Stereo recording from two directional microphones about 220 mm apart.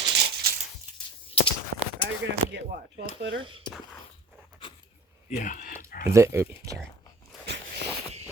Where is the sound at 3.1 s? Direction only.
55° right (ahead or behind).